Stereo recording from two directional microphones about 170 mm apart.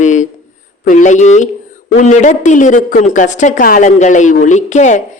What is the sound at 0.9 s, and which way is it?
Speech, 45° left (ahead or behind).